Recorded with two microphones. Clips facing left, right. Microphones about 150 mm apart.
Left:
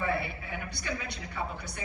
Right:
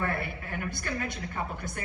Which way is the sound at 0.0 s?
55° right (ahead or behind).